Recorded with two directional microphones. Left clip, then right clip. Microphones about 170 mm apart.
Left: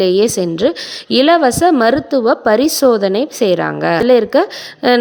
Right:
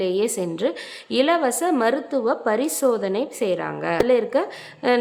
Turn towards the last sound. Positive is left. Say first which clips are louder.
# left 8 dB
turn(degrees=40)  # may be behind; listen again after turning